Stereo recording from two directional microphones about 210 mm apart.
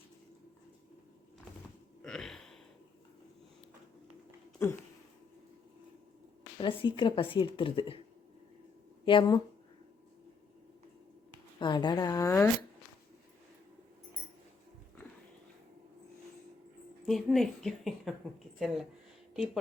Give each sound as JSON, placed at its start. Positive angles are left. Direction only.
{"t": 2.0, "sound": "a sound", "side_deg": 5}
{"t": 4.6, "sound": "speech", "side_deg": 10}
{"t": 6.6, "sound": "speech", "side_deg": 25}
{"t": 9.0, "sound": "speech", "side_deg": 25}
{"t": 11.6, "sound": "speech", "side_deg": 20}
{"t": 17.1, "sound": "speech", "side_deg": 0}